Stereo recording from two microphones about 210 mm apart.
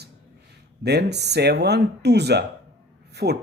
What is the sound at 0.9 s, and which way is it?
Speech, 50° right (ahead or behind).